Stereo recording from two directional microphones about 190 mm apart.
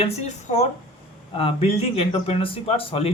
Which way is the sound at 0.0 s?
35° left (ahead or behind).